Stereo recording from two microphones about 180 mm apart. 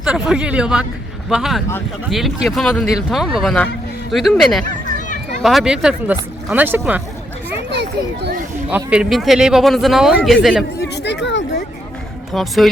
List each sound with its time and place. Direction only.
0.0 s speech: 5° right (ahead or behind)
7.7 s a child's voice: 70° right (ahead or behind)
8.7 s speech: 5° right (ahead or behind)
10.8 s a sound: 70° left (ahead or behind)
12.3 s speech: centre (ahead or behind)